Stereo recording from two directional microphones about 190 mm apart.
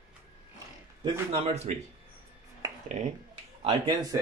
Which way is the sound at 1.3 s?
35° right (ahead or behind).